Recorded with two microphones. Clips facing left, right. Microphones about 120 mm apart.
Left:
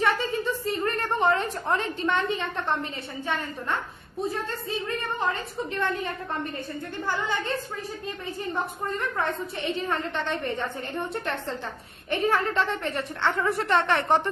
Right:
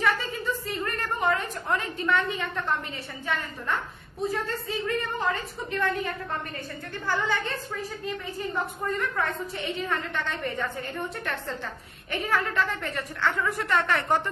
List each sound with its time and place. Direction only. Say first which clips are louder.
0.0 s a sound: left 2 dB; 25° left (ahead or behind)
4.5 s a woman's voice: right 1 dB; 25° left (ahead or behind)
8.9 s a woman's voice: left 1 dB; 25° left (ahead or behind)